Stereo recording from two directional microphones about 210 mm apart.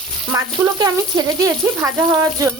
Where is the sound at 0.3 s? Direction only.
15° right (ahead or behind).